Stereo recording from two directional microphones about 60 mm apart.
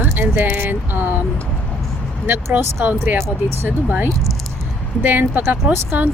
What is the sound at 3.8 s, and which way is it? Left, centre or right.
A woman's voice, right.